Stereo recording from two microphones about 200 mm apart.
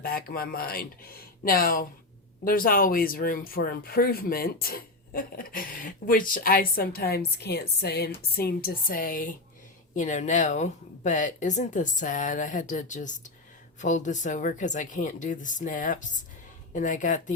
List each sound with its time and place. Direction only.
0.0 s speech: 50° left (ahead or behind)